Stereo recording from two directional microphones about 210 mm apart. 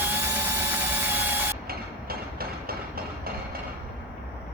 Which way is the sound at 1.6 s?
45° right (ahead or behind).